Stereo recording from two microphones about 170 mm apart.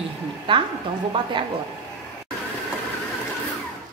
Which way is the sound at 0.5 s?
30° right (ahead or behind).